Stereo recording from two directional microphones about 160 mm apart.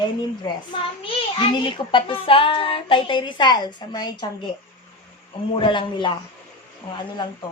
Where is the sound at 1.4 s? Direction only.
30° left (ahead or behind).